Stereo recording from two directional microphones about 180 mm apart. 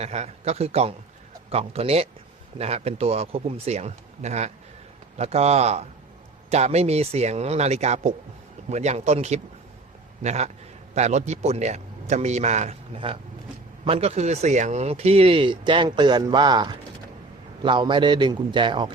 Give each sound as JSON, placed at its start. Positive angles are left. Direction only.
{"t": 0.0, "sound": "a man's voice", "side_deg": -35}